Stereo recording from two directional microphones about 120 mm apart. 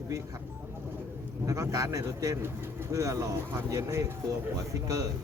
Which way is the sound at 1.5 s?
30° right (ahead or behind).